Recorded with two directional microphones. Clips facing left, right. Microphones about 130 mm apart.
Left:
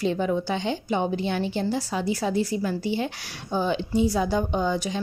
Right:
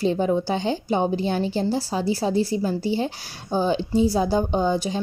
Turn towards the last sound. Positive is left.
turn(degrees=-35)  # may be behind; listen again after turning